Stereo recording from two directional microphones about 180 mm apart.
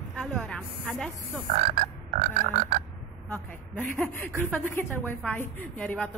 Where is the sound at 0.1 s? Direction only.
5° left (ahead or behind).